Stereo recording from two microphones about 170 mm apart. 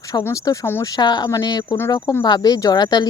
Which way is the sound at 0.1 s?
15° left (ahead or behind).